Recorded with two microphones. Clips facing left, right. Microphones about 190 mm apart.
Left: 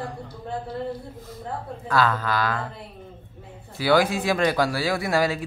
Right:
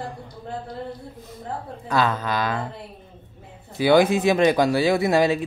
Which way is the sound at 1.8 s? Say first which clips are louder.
Even; 20° right (ahead or behind).